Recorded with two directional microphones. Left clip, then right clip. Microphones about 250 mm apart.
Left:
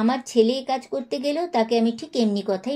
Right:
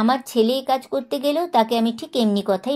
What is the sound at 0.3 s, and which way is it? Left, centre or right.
Speech, right.